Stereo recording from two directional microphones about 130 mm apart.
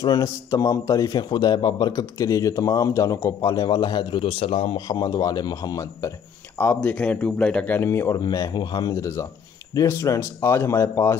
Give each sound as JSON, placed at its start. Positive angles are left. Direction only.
{"t": 0.0, "sound": "a man's voice", "side_deg": 30}
{"t": 4.7, "sound": "a man's voice", "side_deg": 30}
{"t": 6.6, "sound": "a man's voice", "side_deg": 15}